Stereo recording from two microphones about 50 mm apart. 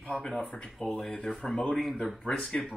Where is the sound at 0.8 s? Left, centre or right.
Centre.